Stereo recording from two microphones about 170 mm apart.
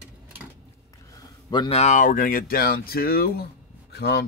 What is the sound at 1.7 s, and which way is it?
Speech, 45° left (ahead or behind).